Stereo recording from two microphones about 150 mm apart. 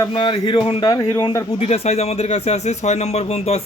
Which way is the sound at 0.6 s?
45° left (ahead or behind).